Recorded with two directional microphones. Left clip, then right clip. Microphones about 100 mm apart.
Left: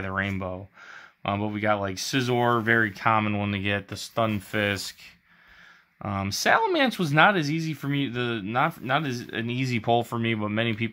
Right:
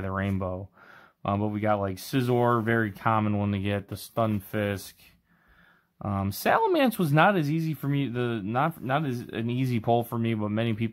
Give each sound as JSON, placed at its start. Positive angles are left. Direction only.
{"t": 0.0, "sound": "speech", "side_deg": -35}
{"t": 6.0, "sound": "speech", "side_deg": -35}
{"t": 10.0, "sound": "speech", "side_deg": -15}